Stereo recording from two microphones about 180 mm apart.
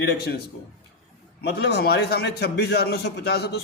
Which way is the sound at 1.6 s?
65° left (ahead or behind).